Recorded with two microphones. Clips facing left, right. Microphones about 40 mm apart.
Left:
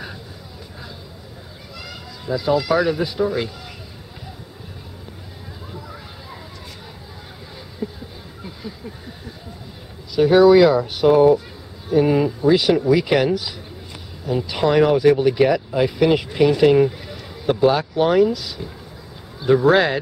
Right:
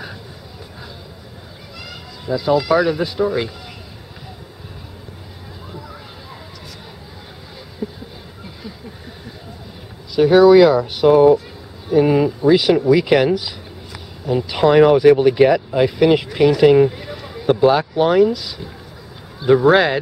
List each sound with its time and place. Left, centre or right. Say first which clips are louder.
1.9 s speech: right 2 dB; centre
7.8 s a sound: right 1 dB; centre
10.1 s speech: right 2 dB; centre